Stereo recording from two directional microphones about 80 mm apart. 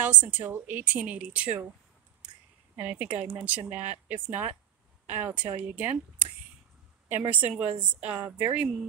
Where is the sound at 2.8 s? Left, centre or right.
Centre.